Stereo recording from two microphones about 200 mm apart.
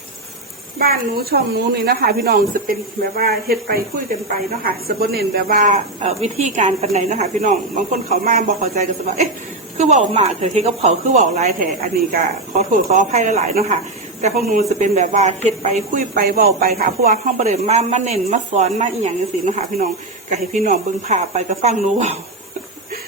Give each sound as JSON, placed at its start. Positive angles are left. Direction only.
{"t": 0.8, "sound": "a woman's voice", "side_deg": -50}
{"t": 6.0, "sound": "a woman's voice", "side_deg": -30}
{"t": 12.9, "sound": "a woman's voice", "side_deg": -40}